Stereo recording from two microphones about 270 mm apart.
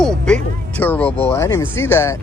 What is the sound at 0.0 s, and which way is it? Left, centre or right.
Music, centre.